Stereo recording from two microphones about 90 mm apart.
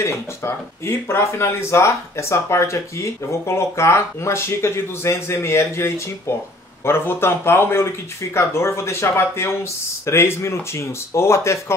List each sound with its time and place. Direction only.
0.0 s speech: 30° left (ahead or behind)